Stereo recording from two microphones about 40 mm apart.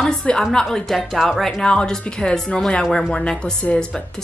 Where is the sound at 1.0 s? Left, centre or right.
Centre.